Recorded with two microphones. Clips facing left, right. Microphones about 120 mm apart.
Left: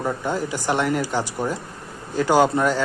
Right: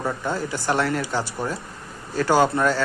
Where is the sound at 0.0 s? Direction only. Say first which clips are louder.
Left 2 dB; 15° left (ahead or behind).